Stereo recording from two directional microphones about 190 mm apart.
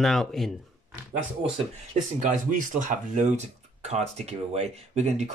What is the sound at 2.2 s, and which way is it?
Speech, 40° right (ahead or behind).